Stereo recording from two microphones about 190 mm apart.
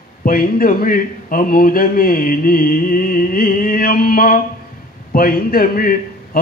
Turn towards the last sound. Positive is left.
turn(degrees=50)  # may be behind; listen again after turning